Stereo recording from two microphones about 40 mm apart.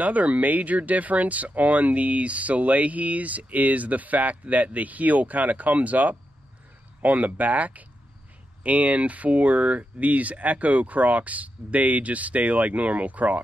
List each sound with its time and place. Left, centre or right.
0.0 s speech: right